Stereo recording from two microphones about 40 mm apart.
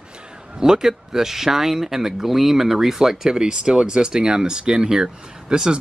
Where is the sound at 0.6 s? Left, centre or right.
Centre.